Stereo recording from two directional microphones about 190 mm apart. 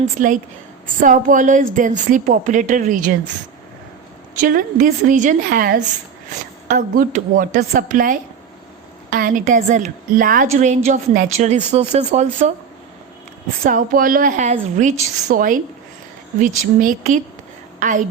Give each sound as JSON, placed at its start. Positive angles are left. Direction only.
{"t": 0.2, "sound": "a woman's voice", "side_deg": -45}
{"t": 4.4, "sound": "a woman's voice", "side_deg": -45}
{"t": 13.7, "sound": "a woman's voice", "side_deg": -45}